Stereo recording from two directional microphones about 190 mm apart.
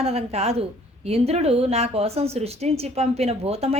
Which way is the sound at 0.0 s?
30° right (ahead or behind).